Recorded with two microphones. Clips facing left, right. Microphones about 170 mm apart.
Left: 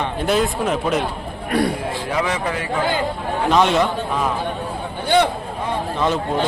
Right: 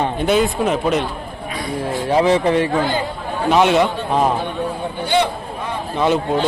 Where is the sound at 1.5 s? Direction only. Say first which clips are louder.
Left 9 dB; 65° left (ahead or behind).